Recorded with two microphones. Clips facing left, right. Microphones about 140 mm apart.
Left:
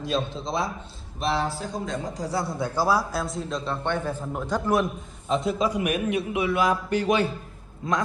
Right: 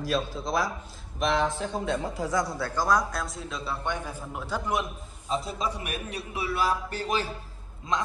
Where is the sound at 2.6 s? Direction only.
15° left (ahead or behind); by 4.7 s 10° right (ahead or behind).